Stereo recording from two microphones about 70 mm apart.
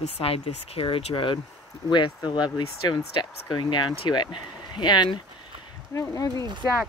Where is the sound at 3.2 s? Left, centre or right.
Left.